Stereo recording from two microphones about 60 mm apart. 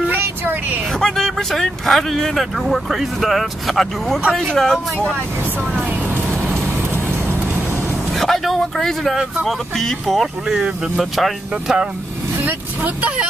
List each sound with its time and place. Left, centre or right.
0.2 s vehicle: right
0.9 s speech: centre
6.3 s music: right
8.1 s vehicle: centre
9.1 s speech: centre
9.5 s speech: centre
10.5 s speech: centre
12.4 s speech: right